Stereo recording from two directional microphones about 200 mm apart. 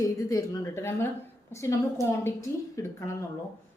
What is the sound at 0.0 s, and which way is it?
A woman's voice, 15° left (ahead or behind).